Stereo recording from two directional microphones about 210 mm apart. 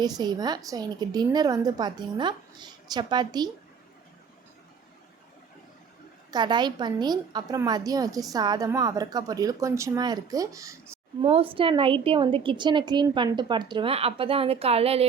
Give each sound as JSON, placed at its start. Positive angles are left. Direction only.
{"t": 0.0, "sound": "a woman's voice", "side_deg": -20}
{"t": 6.3, "sound": "a woman's voice", "side_deg": -20}
{"t": 11.2, "sound": "a woman's voice", "side_deg": -25}